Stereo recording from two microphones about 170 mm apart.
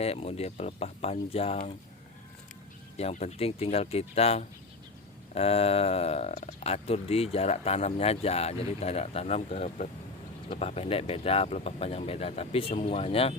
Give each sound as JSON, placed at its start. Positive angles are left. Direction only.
{"t": 0.0, "sound": "speech", "side_deg": 35}
{"t": 3.0, "sound": "speech", "side_deg": 40}